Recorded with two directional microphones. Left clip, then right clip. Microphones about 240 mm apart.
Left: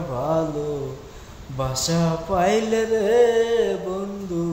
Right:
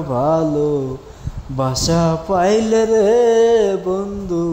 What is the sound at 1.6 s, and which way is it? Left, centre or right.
Mantra, right.